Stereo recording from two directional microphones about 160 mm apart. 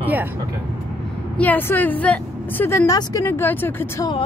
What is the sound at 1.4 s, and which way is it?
A woman's voice, 10° left (ahead or behind).